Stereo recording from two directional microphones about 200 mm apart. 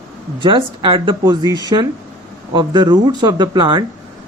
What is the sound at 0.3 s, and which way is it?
Speech, 25° right (ahead or behind).